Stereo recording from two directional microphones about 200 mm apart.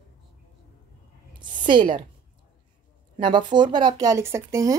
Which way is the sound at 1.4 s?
25° right (ahead or behind).